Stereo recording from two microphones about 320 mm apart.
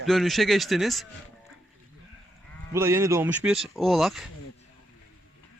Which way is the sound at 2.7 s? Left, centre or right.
Centre.